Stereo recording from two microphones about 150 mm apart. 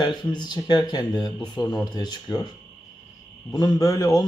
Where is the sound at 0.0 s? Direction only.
30° left (ahead or behind).